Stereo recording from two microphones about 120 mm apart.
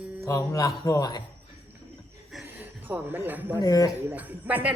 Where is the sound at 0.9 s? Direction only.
30° left (ahead or behind).